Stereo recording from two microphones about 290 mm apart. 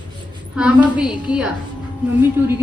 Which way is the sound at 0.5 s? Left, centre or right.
Centre.